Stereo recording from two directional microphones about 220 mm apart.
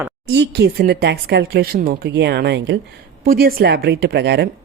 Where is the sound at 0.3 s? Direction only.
50° right (ahead or behind).